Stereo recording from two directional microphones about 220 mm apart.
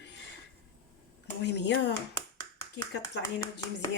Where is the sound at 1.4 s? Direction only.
50° left (ahead or behind).